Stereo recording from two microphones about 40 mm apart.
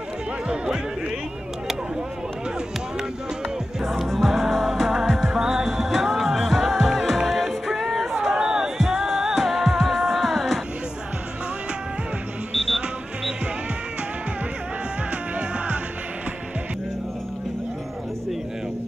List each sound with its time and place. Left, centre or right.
4.0 s music: centre
8.4 s music: centre
9.0 s music: centre
12.5 s music: centre